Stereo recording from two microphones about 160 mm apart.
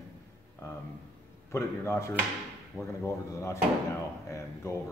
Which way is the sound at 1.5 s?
15° left (ahead or behind).